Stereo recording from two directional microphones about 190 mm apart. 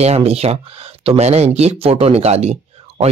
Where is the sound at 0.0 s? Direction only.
35° right (ahead or behind).